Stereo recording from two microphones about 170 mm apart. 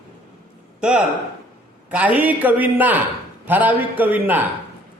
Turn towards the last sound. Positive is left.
turn(degrees=-10)  # may be behind; listen again after turning